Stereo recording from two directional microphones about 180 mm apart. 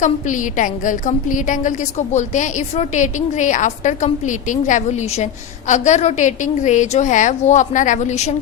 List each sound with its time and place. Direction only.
0.0 s a woman's voice: 45° left (ahead or behind)